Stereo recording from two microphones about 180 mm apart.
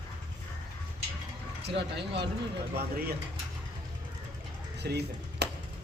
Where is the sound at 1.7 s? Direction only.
70° right (ahead or behind).